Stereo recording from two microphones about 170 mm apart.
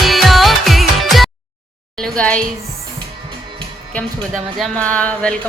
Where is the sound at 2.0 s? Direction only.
5° left (ahead or behind).